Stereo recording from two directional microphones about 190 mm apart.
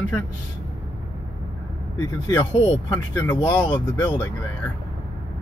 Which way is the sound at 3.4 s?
15° left (ahead or behind).